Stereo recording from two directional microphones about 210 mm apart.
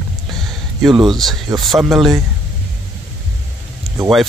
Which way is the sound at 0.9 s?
20° right (ahead or behind).